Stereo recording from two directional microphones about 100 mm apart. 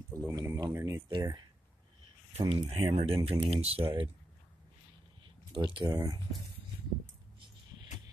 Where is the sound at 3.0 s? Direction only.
65° right (ahead or behind).